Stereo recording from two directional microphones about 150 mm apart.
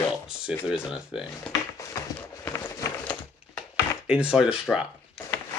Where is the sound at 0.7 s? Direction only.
5° right (ahead or behind).